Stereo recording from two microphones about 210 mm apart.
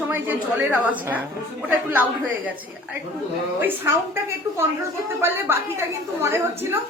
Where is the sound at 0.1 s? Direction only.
5° right (ahead or behind).